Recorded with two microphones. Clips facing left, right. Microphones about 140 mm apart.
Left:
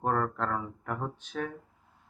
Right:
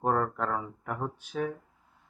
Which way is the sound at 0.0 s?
5° right (ahead or behind).